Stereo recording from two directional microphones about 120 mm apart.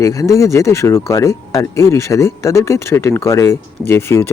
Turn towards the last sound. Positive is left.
turn(degrees=20)  # may be behind; listen again after turning